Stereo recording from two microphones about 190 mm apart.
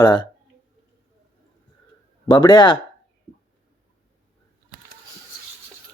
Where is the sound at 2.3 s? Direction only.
25° left (ahead or behind).